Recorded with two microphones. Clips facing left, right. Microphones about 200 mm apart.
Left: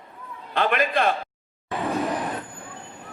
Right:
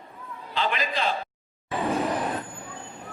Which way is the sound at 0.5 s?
55° left (ahead or behind).